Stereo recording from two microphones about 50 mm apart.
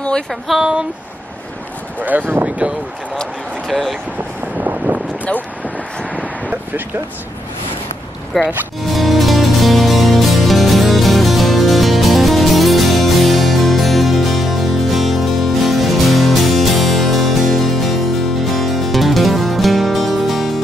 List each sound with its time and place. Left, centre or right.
0.3 s speech: centre
2.0 s speech: right
3.6 s speech: centre
6.1 s vehicle: right
8.3 s speech: centre
8.9 s music: centre